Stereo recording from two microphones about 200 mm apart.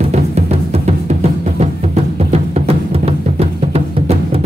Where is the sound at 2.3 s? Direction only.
30° right (ahead or behind).